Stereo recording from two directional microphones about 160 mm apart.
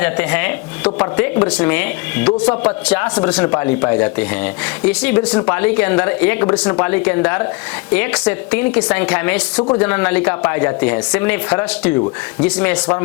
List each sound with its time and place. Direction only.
0.0 s a man's voice: 10° left (ahead or behind)